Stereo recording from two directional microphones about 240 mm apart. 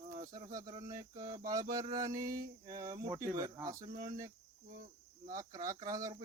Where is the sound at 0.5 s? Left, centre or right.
Centre.